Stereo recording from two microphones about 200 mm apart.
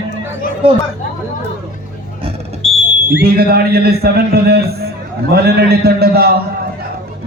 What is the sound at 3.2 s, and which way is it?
Speech, 50° right (ahead or behind).